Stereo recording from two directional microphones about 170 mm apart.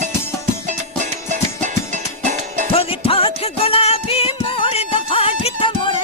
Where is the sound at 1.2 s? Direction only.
45° right (ahead or behind).